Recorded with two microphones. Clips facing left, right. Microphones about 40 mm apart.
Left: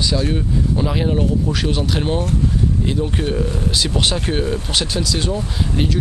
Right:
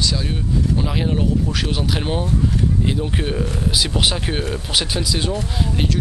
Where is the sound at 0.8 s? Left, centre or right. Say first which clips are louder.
Left 2 dB; centre.